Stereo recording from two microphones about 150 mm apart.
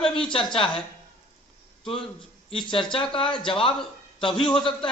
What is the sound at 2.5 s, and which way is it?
Speech, 35° left (ahead or behind).